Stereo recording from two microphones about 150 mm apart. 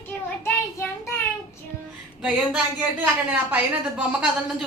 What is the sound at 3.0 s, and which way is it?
A woman's voice, 10° right (ahead or behind).